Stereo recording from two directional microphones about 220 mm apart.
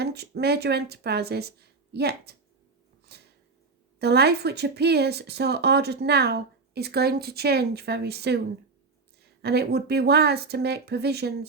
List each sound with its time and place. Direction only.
0.0 s speech: 50° right (ahead or behind)
3.1 s a sound: 45° right (ahead or behind)
4.0 s speech: 45° right (ahead or behind)
9.4 s speech: 50° right (ahead or behind)